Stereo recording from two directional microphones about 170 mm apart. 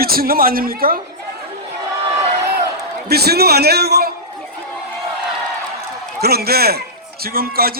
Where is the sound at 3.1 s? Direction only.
65° right (ahead or behind).